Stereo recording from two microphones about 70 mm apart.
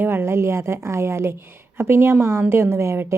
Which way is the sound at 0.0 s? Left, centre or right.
Right.